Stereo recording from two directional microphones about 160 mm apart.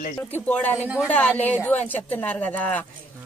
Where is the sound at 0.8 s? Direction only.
5° right (ahead or behind).